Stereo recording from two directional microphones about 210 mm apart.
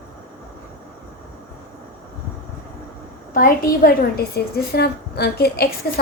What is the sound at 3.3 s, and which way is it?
A woman's voice, 40° left (ahead or behind).